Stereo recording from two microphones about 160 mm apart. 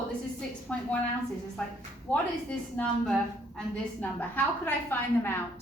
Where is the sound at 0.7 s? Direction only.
10° left (ahead or behind).